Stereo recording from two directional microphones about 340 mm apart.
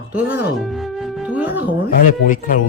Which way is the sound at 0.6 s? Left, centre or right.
Centre.